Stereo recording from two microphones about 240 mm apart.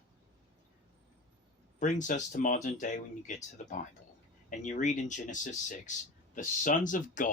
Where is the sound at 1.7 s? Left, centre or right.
Left.